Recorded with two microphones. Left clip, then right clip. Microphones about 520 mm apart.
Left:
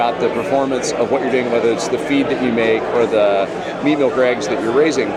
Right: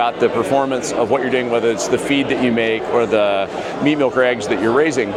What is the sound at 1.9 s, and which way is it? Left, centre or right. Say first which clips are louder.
Speech: even; right.